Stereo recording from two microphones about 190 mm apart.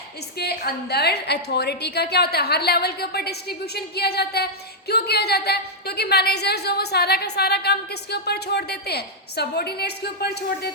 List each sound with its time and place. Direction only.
0.3 s a woman's voice: 60° left (ahead or behind)